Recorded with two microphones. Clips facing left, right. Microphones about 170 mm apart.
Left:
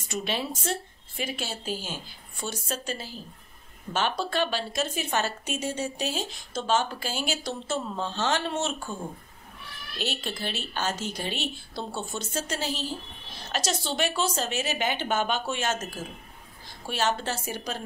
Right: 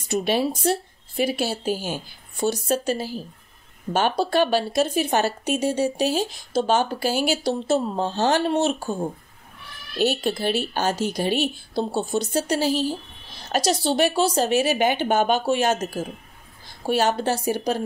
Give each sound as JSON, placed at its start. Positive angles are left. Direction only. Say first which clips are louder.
{"t": 0.1, "sound": "speech", "louder": "right 9 dB", "side_deg": -40}
{"t": 9.9, "sound": "speech", "louder": "right 11 dB", "side_deg": -45}